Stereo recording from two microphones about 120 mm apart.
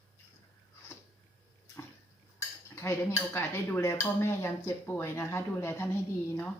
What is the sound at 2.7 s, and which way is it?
Speech, 20° left (ahead or behind).